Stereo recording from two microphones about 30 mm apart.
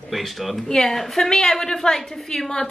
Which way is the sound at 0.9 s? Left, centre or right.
Centre.